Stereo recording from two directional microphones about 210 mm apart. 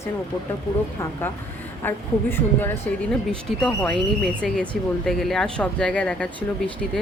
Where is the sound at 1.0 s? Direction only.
10° left (ahead or behind).